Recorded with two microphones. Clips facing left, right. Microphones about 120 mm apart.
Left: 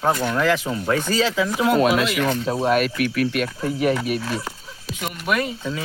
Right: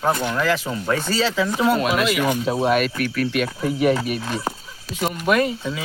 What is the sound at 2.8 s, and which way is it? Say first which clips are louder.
Speech: left 1 dB; 5° left (ahead or behind).